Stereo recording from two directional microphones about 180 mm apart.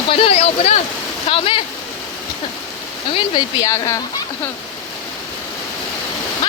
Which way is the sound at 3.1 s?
25° left (ahead or behind).